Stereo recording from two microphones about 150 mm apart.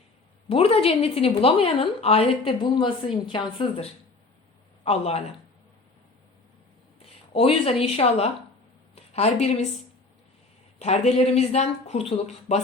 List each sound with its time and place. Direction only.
0.4 s a woman's voice: 40° left (ahead or behind)
7.0 s a woman's voice: 40° left (ahead or behind)
10.8 s speech: 45° left (ahead or behind)